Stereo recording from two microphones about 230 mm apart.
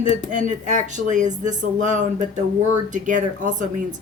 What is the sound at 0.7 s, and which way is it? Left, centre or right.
A woman's voice, right.